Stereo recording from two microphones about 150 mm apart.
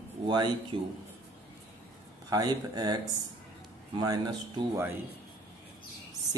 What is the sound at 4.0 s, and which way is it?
Speech, 25° right (ahead or behind).